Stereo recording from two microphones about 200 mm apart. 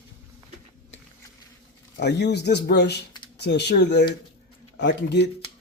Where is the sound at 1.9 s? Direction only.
60° left (ahead or behind).